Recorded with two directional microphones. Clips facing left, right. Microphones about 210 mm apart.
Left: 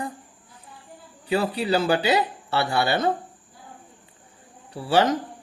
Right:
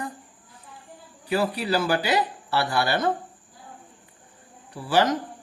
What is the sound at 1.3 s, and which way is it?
Speech, 25° left (ahead or behind).